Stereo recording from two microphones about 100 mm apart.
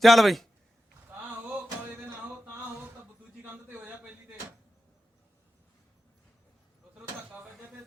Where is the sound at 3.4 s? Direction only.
20° right (ahead or behind).